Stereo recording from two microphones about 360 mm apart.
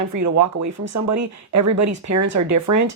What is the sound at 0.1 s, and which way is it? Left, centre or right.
Speech, right.